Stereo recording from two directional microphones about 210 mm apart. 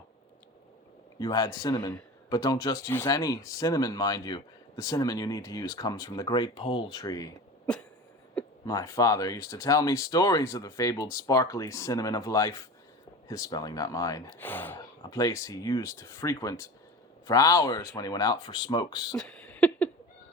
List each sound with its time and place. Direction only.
1.2 s a man's voice: 15° left (ahead or behind)
8.6 s a man's voice: 15° left (ahead or behind)
19.1 s a sound: 5° left (ahead or behind)